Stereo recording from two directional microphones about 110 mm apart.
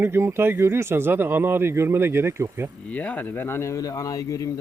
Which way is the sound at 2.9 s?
15° left (ahead or behind).